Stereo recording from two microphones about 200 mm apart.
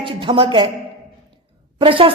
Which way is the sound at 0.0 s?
25° right (ahead or behind).